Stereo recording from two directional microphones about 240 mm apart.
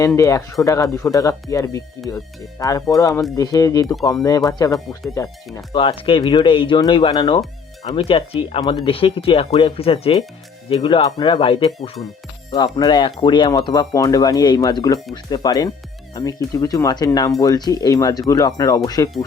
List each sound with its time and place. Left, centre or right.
0.2 s speech: centre